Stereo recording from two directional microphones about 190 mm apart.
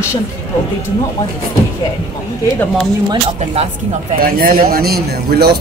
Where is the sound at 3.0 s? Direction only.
30° right (ahead or behind).